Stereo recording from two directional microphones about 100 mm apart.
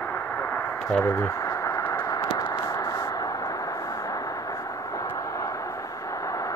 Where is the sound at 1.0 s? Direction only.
30° left (ahead or behind).